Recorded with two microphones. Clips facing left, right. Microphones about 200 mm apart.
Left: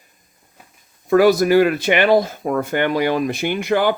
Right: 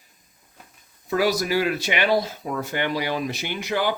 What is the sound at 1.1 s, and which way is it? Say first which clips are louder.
Speech: left 9 dB; 55° left (ahead or behind).